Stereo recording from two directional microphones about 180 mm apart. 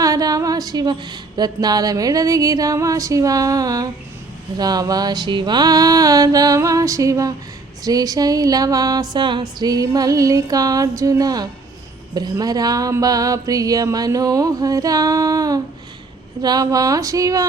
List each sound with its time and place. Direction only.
0.0 s speech: 20° right (ahead or behind)